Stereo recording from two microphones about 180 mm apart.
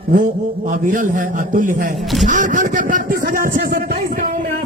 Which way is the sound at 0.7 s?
50° right (ahead or behind).